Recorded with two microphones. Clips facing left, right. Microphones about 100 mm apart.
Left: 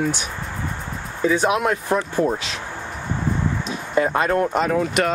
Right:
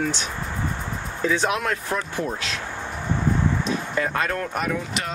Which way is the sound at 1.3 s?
15° left (ahead or behind).